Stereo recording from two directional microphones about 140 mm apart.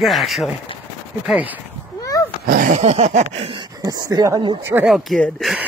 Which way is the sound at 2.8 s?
50° right (ahead or behind).